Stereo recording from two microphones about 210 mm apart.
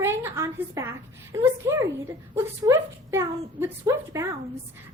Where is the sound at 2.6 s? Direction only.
15° right (ahead or behind).